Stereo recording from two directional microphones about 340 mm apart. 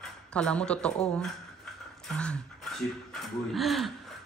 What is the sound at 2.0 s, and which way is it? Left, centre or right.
Speech, centre.